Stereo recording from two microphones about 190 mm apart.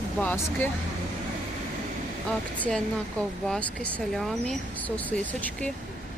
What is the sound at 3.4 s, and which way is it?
Speech, 5° left (ahead or behind).